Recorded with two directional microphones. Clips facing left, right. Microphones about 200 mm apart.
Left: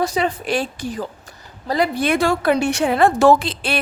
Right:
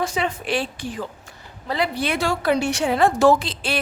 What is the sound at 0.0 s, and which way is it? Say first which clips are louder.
A woman's voice: left 4 dB; 35° left (ahead or behind).